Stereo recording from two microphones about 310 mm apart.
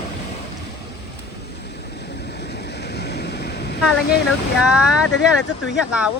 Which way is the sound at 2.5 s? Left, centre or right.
Left.